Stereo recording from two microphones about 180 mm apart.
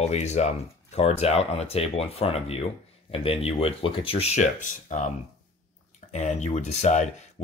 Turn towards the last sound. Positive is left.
turn(degrees=40)  # may be behind; listen again after turning